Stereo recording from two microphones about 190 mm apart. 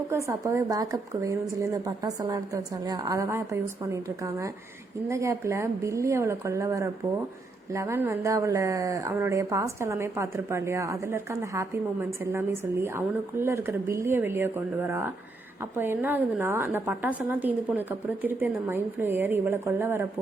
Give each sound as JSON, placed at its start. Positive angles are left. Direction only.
{"t": 0.1, "sound": "speech", "side_deg": -15}